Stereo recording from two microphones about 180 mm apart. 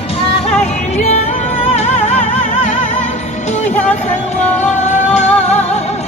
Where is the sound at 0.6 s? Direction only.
40° left (ahead or behind).